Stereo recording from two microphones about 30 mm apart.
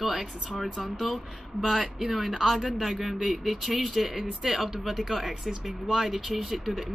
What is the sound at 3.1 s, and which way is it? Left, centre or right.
Speech, right.